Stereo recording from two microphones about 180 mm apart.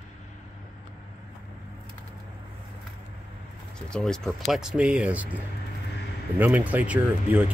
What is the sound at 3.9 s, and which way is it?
Speech, 5° left (ahead or behind).